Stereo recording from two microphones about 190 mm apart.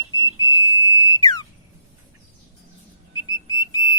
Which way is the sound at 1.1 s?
20° left (ahead or behind).